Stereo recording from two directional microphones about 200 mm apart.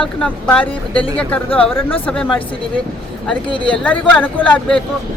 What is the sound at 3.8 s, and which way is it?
Speech, 5° left (ahead or behind).